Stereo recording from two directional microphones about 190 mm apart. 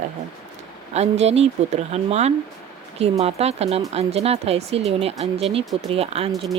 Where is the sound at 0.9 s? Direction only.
35° right (ahead or behind).